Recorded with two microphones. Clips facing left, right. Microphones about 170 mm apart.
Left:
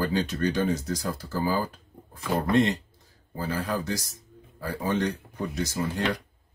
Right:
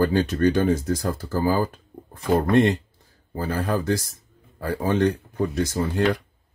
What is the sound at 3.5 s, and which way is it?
Speech, 55° right (ahead or behind).